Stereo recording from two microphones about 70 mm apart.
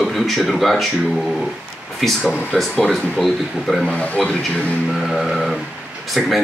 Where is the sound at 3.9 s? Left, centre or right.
Centre.